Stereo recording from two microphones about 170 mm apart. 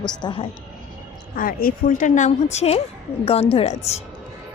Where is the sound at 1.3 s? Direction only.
55° left (ahead or behind).